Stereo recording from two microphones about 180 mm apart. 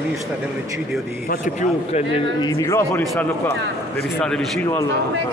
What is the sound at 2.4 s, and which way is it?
Speech, 15° left (ahead or behind).